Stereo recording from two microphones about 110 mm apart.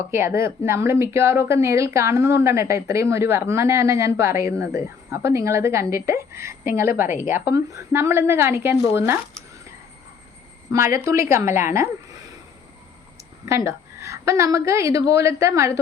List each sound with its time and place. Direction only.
0.1 s speech: 25° right (ahead or behind)
10.7 s speech: 30° right (ahead or behind)
13.4 s speech: 25° right (ahead or behind)